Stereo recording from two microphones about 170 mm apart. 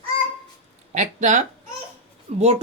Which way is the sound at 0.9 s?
45° right (ahead or behind).